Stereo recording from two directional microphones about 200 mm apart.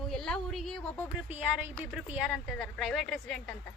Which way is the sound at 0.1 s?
Centre (ahead or behind).